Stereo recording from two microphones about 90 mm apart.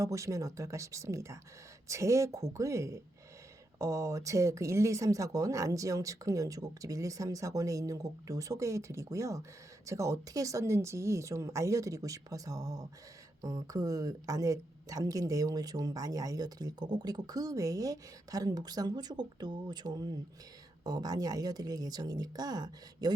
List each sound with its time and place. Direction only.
0.0 s speech: 35° right (ahead or behind)